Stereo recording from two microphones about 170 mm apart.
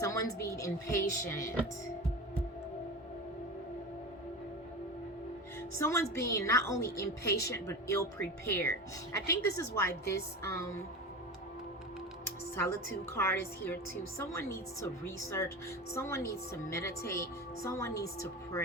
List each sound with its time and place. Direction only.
0.0 s a woman's voice: 15° left (ahead or behind)
5.7 s a woman's voice: 15° left (ahead or behind)
12.2 s a woman's voice: 15° left (ahead or behind)